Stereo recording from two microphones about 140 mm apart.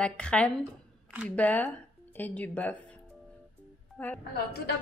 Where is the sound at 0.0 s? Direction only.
5° left (ahead or behind).